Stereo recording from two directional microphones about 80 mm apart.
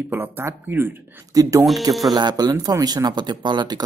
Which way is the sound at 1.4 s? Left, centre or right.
Right.